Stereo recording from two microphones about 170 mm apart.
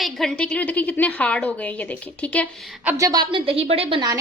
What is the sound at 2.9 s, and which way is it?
A woman's voice, 20° right (ahead or behind).